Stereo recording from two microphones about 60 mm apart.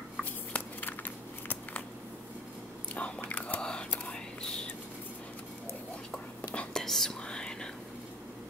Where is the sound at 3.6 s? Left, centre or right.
Centre.